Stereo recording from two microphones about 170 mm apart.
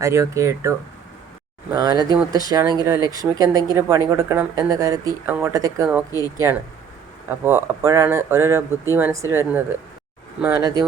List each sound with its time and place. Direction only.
0.0 s speech: 15° right (ahead or behind)
1.7 s speech: 25° right (ahead or behind)